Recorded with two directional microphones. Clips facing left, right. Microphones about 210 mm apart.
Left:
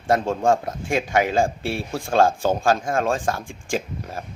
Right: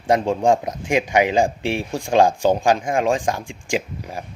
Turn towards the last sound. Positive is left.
turn(degrees=-15)  # may be behind; listen again after turning